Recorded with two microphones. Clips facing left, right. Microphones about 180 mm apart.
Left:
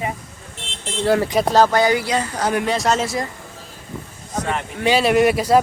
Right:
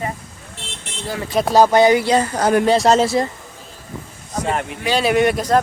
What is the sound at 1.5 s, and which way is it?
Speech, 15° right (ahead or behind).